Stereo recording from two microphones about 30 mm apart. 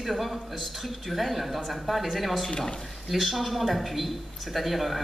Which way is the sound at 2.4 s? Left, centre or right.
Left.